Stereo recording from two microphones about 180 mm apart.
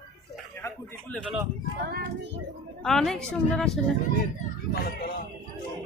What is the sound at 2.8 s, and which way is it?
Speech, centre (ahead or behind).